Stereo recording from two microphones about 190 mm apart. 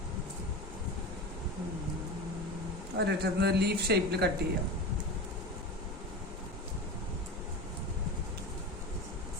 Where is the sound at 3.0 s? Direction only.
60° right (ahead or behind).